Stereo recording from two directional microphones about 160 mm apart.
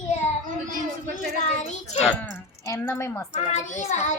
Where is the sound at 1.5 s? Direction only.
45° left (ahead or behind).